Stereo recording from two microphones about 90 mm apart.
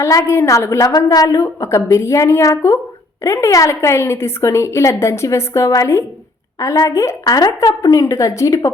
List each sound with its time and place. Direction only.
0.0 s a woman's voice: 30° left (ahead or behind)
7.3 s speech: 45° left (ahead or behind)
7.7 s a woman's voice: 35° left (ahead or behind)